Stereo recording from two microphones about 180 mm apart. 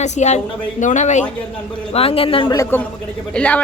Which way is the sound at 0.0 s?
40° left (ahead or behind).